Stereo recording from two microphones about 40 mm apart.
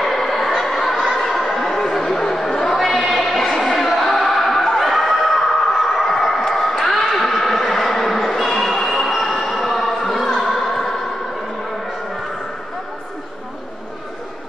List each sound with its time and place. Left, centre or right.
0.0 s a sound: centre
1.2 s chatter: centre
2.8 s music: centre
9.1 s train: centre
9.4 s music: centre